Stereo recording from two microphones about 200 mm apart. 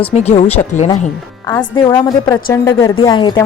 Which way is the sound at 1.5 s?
15° left (ahead or behind).